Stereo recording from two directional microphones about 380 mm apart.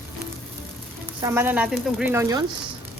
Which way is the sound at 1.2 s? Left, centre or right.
Centre.